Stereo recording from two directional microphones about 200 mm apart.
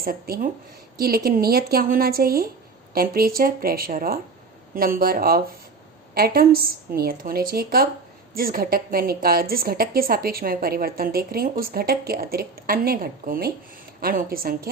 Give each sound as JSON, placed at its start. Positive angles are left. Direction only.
{"t": 0.0, "sound": "a woman's voice", "side_deg": -45}